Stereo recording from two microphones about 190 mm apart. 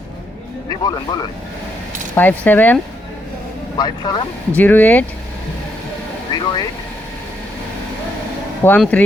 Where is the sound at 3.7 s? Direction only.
20° left (ahead or behind).